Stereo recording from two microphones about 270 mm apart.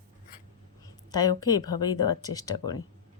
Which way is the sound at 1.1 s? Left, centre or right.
Centre.